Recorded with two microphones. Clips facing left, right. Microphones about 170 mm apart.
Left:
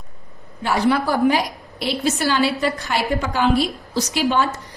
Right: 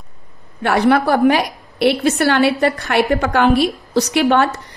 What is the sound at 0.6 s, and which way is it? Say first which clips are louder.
A woman's voice: right 5 dB; 60° right (ahead or behind).